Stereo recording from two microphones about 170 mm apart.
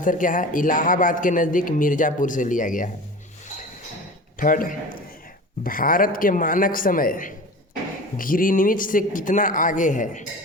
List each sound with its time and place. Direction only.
0.0 s speech: 50° left (ahead or behind)
4.4 s a man's voice: 55° left (ahead or behind)